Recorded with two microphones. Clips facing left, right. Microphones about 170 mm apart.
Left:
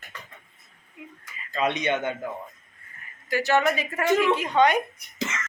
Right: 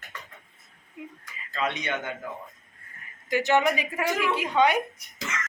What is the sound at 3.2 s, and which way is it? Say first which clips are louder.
Speech: even; 20° right (ahead or behind).